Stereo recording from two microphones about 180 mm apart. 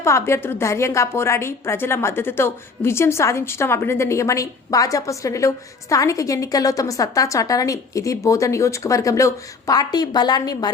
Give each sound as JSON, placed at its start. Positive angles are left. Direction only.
{"t": 0.0, "sound": "a woman's voice", "side_deg": 15}